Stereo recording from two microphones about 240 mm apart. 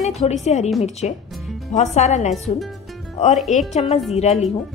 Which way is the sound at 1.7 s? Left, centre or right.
Left.